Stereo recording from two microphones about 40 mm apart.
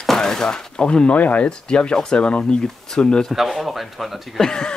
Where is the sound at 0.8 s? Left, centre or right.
Left.